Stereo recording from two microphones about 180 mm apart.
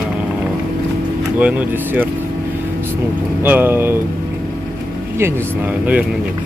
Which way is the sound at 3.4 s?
10° right (ahead or behind).